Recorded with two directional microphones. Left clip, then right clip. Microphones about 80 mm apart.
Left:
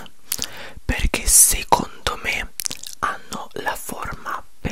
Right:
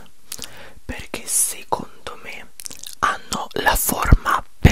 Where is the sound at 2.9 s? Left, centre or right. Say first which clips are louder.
Right 5 dB; centre.